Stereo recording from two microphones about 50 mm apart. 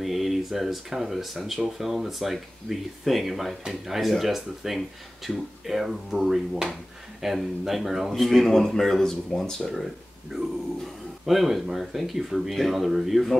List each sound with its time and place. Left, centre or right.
0.0 s speech: centre
11.2 s speech: centre